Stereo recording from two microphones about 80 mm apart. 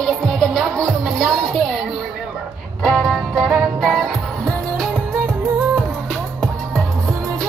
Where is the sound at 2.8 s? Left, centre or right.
Centre.